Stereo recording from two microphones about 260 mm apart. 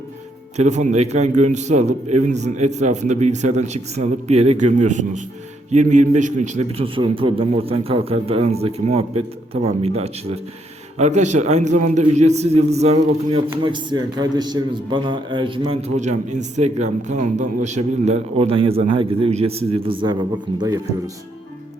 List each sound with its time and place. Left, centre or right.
0.5 s a man's voice: right